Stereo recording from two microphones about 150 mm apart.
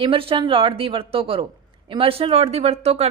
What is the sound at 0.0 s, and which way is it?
Speech, 35° right (ahead or behind).